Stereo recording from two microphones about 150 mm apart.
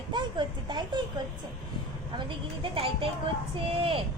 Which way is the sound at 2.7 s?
40° right (ahead or behind).